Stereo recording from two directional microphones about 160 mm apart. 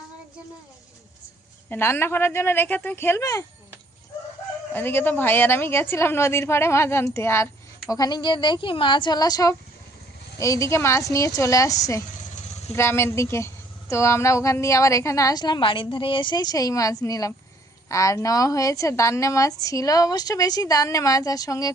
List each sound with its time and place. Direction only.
1.7 s speech: 15° left (ahead or behind)
4.7 s a woman's voice: 15° left (ahead or behind)
12.3 s vehicle: 45° left (ahead or behind)
12.7 s a woman's voice: 15° left (ahead or behind)